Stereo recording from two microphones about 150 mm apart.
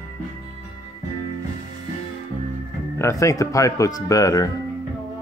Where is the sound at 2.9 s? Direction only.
20° left (ahead or behind).